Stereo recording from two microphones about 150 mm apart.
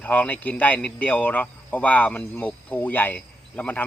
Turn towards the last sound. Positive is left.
turn(degrees=10)  # may be behind; listen again after turning